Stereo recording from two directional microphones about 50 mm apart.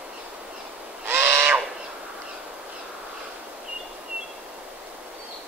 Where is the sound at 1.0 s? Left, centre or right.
Right.